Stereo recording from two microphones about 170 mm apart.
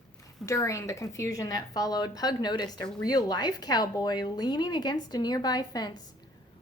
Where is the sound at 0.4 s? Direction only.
15° left (ahead or behind).